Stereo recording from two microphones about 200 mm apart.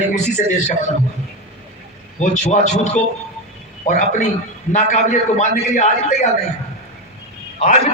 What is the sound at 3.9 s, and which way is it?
A man's voice, 40° left (ahead or behind).